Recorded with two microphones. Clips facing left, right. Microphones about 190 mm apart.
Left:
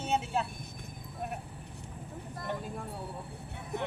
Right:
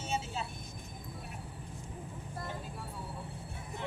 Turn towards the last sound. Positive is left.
turn(degrees=65)  # may be behind; listen again after turning